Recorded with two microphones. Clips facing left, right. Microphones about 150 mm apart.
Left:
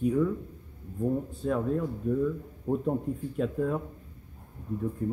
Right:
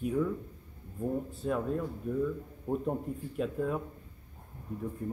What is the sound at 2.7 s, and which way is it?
Speech, centre (ahead or behind).